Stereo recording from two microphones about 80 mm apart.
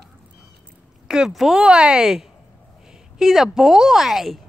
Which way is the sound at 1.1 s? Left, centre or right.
Centre.